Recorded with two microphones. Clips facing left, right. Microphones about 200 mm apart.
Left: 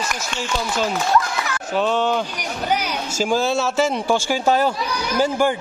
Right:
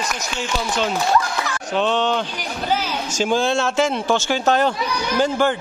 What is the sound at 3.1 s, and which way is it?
Speech, 5° left (ahead or behind).